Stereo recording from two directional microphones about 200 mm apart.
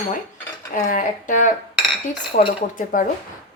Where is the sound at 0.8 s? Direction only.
40° left (ahead or behind).